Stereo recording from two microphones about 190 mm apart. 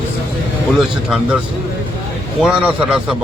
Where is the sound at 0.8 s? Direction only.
5° right (ahead or behind).